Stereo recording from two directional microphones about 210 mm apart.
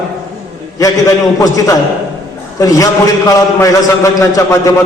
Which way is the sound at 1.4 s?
15° left (ahead or behind).